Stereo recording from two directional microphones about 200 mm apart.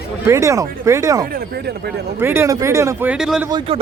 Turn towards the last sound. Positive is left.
turn(degrees=-5)  # may be behind; listen again after turning